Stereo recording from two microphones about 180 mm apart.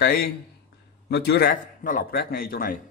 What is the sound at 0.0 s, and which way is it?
A man's voice, 60° left (ahead or behind).